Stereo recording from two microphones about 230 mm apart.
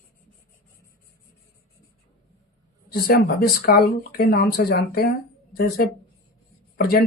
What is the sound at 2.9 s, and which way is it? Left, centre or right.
Speech, left.